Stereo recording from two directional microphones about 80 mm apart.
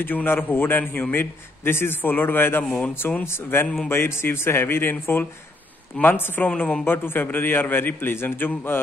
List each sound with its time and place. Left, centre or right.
0.0 s a man's voice: left